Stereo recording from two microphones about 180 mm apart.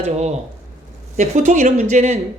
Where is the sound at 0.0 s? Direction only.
40° right (ahead or behind).